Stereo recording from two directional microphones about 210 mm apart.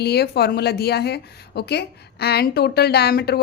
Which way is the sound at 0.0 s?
50° left (ahead or behind).